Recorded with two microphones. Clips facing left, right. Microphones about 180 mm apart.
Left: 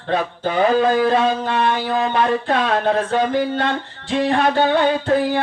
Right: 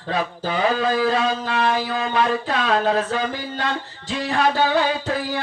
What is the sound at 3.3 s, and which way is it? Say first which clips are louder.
Music: left 7 dB; 60° left (ahead or behind).